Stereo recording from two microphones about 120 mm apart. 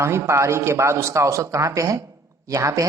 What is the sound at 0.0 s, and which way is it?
A woman's voice, 25° right (ahead or behind).